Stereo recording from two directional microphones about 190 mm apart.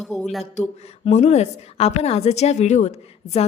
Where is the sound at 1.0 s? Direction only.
35° left (ahead or behind).